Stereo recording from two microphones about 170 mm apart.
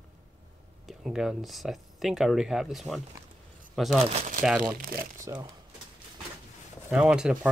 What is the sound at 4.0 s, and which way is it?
Speech, 40° right (ahead or behind).